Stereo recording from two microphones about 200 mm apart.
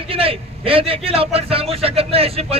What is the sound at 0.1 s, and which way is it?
A man's voice, 30° right (ahead or behind).